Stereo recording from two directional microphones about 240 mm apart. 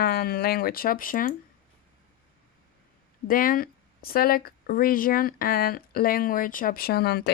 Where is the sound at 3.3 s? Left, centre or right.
Left.